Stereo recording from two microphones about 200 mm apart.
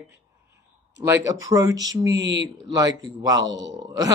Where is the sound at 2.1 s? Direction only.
60° right (ahead or behind).